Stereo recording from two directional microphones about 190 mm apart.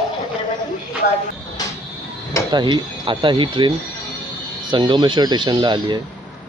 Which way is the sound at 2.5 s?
25° right (ahead or behind).